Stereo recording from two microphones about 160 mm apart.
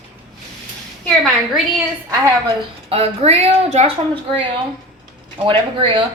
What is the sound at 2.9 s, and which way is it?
A woman's voice, 40° right (ahead or behind).